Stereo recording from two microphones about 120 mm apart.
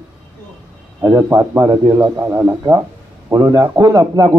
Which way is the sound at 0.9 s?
35° right (ahead or behind).